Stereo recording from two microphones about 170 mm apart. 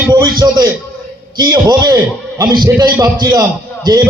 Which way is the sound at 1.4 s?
25° right (ahead or behind).